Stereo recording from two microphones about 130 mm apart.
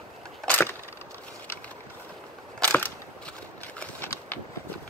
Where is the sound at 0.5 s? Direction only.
15° left (ahead or behind).